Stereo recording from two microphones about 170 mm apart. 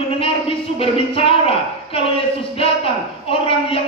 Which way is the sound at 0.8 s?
35° left (ahead or behind).